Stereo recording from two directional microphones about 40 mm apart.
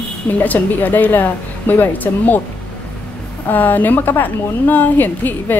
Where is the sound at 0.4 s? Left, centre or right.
Left.